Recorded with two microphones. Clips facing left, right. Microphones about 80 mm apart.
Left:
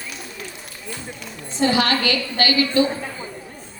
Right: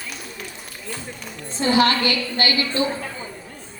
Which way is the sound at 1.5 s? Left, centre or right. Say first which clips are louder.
Right 1 dB; right.